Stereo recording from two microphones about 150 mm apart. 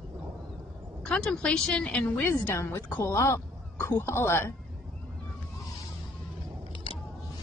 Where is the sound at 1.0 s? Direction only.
5° left (ahead or behind).